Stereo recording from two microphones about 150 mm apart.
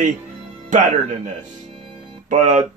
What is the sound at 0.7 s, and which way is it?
Speech, 55° right (ahead or behind).